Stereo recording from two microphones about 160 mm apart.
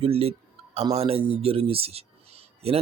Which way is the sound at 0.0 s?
40° right (ahead or behind).